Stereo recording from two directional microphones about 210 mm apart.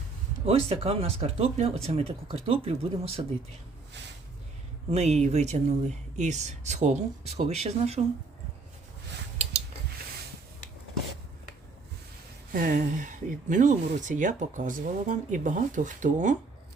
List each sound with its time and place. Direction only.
0.3 s speech: 30° right (ahead or behind)
4.9 s speech: 30° right (ahead or behind)
12.5 s speech: 40° right (ahead or behind)